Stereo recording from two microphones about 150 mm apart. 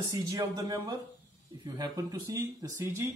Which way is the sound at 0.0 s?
25° right (ahead or behind).